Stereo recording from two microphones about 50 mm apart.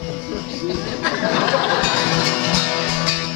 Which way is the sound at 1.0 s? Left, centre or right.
Centre.